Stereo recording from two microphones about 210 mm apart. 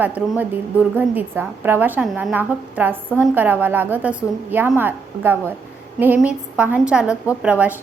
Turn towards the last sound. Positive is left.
turn(degrees=-5)  # may be behind; listen again after turning